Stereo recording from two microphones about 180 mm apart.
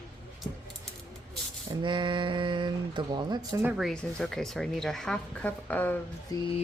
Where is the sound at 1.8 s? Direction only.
25° right (ahead or behind).